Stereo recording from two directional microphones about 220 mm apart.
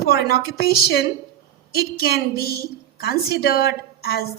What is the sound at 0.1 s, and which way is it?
A woman's voice, 45° left (ahead or behind).